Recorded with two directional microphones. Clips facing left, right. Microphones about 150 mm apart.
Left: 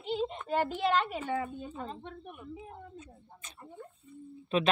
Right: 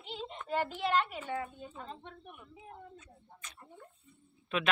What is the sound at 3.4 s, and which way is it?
Snake, 25° left (ahead or behind).